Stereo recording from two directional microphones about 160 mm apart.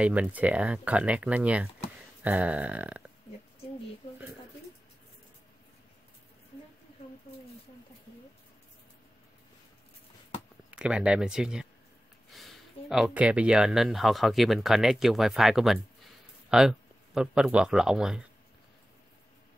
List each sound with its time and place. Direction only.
0.0 s speech: 10° right (ahead or behind)
10.7 s speech: 5° right (ahead or behind)